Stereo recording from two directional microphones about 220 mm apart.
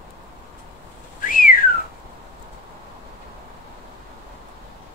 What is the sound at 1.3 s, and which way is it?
Whistling, 40° left (ahead or behind).